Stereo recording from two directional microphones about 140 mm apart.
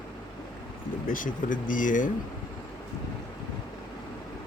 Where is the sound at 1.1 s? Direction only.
75° left (ahead or behind).